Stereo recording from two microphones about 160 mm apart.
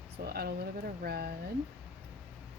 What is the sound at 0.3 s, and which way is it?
Speech, 75° right (ahead or behind).